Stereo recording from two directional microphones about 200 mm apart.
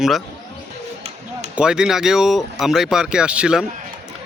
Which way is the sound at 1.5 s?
5° right (ahead or behind).